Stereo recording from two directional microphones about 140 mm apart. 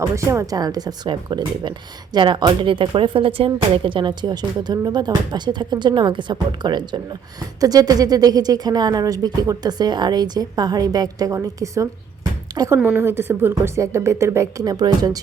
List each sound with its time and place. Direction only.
0.0 s a woman's voice: 20° right (ahead or behind)